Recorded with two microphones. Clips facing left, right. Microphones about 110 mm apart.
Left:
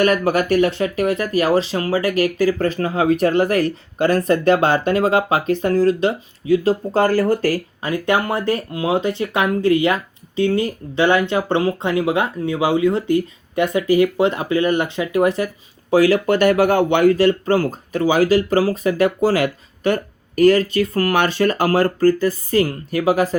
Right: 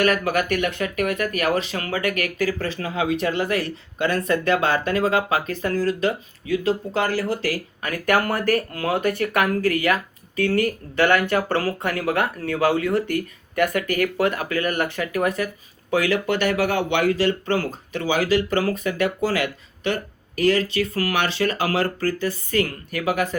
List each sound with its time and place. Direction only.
0.0 s speech: 30° left (ahead or behind)
7.8 s speech: 25° left (ahead or behind)